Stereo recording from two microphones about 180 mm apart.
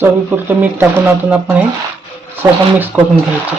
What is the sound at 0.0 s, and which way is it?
Speech, 10° right (ahead or behind).